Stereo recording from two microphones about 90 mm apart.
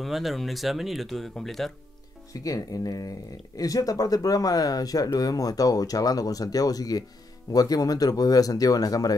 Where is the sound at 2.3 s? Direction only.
40° left (ahead or behind).